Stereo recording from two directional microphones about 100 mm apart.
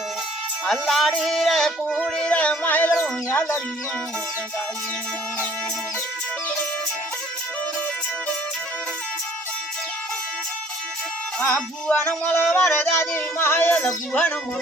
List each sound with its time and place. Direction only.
0.7 s a sound: centre (ahead or behind)
2.0 s music: 5° left (ahead or behind)
11.3 s music: 15° left (ahead or behind)
13.0 s music: 25° left (ahead or behind)